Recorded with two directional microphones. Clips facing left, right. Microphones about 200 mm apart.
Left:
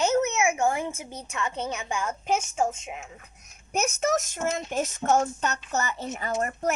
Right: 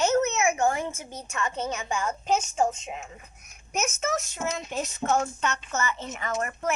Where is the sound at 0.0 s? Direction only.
10° left (ahead or behind).